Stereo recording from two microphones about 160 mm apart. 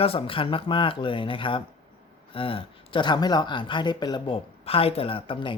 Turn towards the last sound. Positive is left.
turn(degrees=30)  # may be behind; listen again after turning